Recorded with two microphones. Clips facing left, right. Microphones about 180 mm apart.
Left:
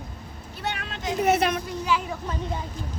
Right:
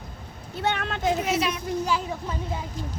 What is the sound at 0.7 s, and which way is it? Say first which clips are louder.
Speech: right 6 dB; 55° right (ahead or behind).